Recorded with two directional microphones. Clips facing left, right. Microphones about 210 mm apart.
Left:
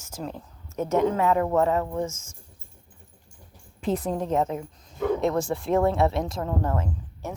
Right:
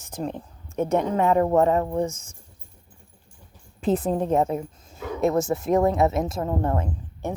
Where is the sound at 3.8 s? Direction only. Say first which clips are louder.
Right 4 dB; 30° right (ahead or behind).